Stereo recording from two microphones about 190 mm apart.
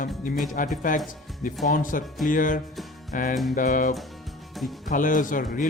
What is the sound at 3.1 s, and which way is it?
Music, 45° left (ahead or behind).